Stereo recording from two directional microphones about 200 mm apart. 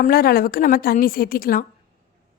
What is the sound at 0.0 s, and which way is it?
A woman's voice, 45° left (ahead or behind).